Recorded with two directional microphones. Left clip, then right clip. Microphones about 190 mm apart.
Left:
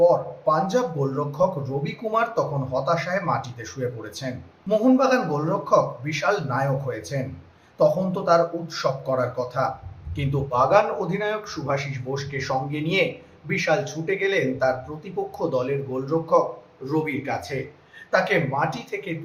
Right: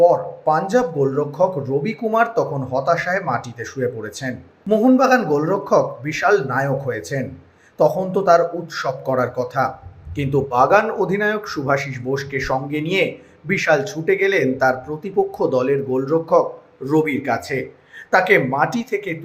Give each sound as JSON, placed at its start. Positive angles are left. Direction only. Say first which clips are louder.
{"t": 0.0, "sound": "speech", "louder": "right 4 dB", "side_deg": -25}